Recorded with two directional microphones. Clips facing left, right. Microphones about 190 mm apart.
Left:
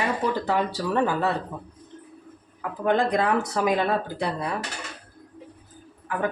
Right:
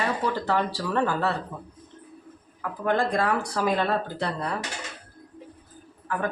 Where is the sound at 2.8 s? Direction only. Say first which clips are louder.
Left 2 dB; 20° left (ahead or behind).